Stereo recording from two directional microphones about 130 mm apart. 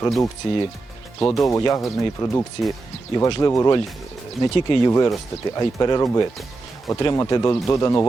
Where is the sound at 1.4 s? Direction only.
25° left (ahead or behind).